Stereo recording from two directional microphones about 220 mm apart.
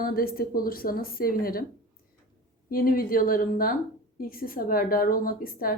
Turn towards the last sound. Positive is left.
turn(degrees=40)  # may be behind; listen again after turning